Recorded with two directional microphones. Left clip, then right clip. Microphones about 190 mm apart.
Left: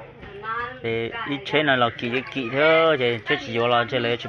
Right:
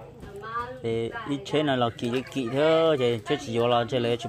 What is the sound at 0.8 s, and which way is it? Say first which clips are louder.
A man's voice: left 2 dB; 20° right (ahead or behind).